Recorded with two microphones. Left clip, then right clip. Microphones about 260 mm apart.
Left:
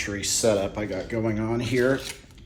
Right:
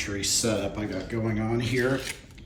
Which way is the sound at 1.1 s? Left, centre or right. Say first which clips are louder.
Left 2 dB; left.